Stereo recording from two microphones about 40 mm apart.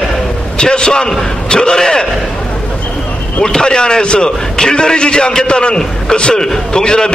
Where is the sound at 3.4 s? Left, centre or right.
Centre.